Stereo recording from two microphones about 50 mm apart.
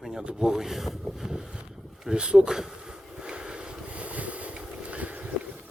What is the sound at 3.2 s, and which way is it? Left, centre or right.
Boat, centre.